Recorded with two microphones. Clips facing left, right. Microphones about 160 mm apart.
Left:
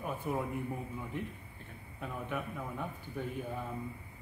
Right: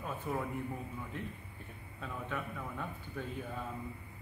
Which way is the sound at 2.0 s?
15° left (ahead or behind).